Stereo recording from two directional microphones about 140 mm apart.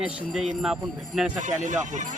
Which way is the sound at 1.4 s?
60° right (ahead or behind).